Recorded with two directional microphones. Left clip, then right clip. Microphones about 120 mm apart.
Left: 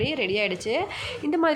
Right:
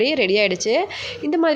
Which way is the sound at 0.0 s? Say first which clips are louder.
Right 8 dB; 40° right (ahead or behind).